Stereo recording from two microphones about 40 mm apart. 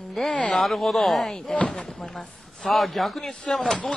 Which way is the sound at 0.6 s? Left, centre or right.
Centre.